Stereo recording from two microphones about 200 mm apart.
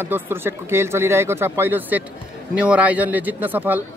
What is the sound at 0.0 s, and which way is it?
Speech, 10° right (ahead or behind).